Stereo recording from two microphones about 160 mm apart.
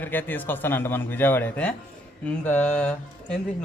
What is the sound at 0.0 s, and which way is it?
A man's voice, 10° left (ahead or behind).